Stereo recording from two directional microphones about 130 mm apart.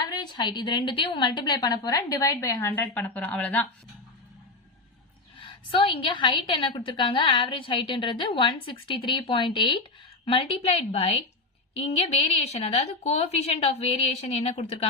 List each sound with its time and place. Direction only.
0.1 s a woman's voice: 35° left (ahead or behind); by 3.6 s 10° left (ahead or behind)
5.4 s a woman's voice: 45° left (ahead or behind)